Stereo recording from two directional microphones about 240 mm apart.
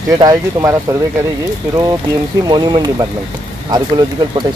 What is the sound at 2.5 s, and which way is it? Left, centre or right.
Speech, centre.